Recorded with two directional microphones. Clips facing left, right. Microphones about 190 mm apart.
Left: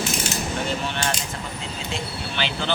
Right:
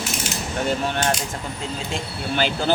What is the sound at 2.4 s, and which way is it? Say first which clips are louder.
Speech: right 5 dB; 45° right (ahead or behind).